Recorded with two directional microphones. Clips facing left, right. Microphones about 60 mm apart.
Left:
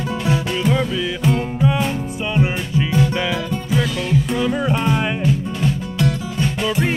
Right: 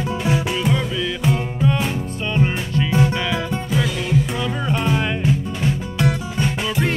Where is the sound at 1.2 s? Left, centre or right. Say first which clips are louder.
Left 2 dB; centre.